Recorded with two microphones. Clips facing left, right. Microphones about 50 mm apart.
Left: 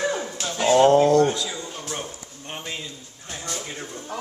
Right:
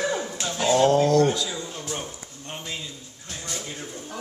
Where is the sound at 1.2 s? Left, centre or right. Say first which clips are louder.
Left 1 dB; centre.